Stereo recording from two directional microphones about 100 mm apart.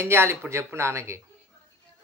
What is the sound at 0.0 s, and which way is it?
Speech, 25° right (ahead or behind).